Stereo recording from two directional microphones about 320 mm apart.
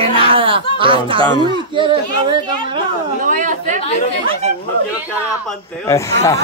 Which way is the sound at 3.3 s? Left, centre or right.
Right.